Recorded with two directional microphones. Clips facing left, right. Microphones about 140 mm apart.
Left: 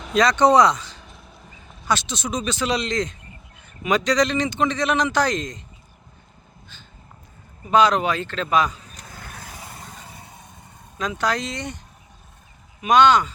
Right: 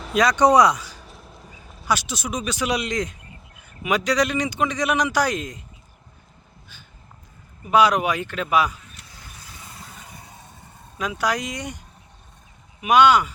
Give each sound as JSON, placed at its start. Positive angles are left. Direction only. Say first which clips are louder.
{"t": 0.0, "sound": "a man's voice", "louder": "left 1 dB", "side_deg": -10}
{"t": 7.7, "sound": "a man's voice", "louder": "even", "side_deg": -10}
{"t": 8.9, "sound": "vehicle", "louder": "left 5 dB", "side_deg": 40}
{"t": 9.1, "sound": "lawn mower", "louder": "left 9 dB", "side_deg": 60}
{"t": 10.9, "sound": "a man's voice", "louder": "even", "side_deg": -10}
{"t": 12.8, "sound": "a man's voice", "louder": "even", "side_deg": -10}